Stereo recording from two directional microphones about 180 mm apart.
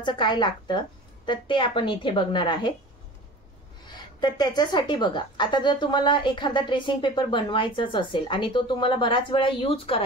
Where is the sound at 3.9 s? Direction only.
25° left (ahead or behind).